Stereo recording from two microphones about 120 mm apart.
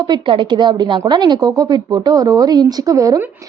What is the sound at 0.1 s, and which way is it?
A woman's voice, 40° right (ahead or behind).